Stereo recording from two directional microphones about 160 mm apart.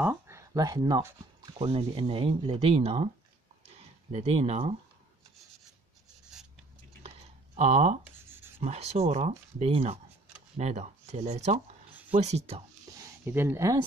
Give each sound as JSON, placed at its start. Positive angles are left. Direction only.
{"t": 0.0, "sound": "speech", "side_deg": -15}
{"t": 3.6, "sound": "a sound", "side_deg": -40}
{"t": 7.5, "sound": "speech", "side_deg": -45}
{"t": 8.2, "sound": "writing", "side_deg": -15}
{"t": 8.6, "sound": "speech", "side_deg": -40}
{"t": 12.9, "sound": "a sound", "side_deg": -15}